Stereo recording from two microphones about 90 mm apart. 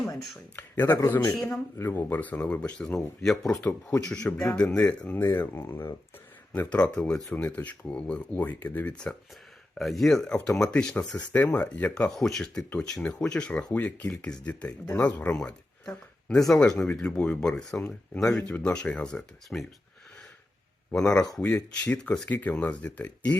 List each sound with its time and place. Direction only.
0.5 s speech: 25° left (ahead or behind)
5.2 s speech: 25° left (ahead or behind)
6.5 s speech: 15° left (ahead or behind)
9.7 s speech: centre (ahead or behind)
12.1 s speech: 5° left (ahead or behind)
20.9 s speech: 10° left (ahead or behind)